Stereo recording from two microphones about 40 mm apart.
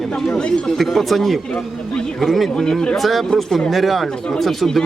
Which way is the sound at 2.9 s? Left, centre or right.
Centre.